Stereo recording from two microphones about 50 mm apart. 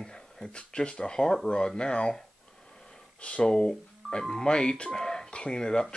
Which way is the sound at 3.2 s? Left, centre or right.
Centre.